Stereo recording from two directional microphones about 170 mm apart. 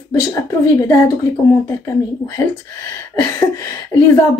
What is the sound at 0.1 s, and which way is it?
A woman's voice, 20° left (ahead or behind).